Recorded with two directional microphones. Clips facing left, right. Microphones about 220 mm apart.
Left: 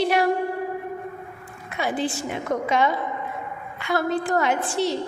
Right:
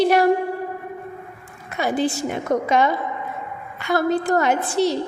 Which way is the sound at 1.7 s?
40° right (ahead or behind).